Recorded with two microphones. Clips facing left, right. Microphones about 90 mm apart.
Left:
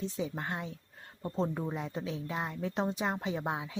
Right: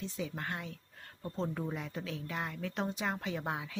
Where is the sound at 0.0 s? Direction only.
25° left (ahead or behind).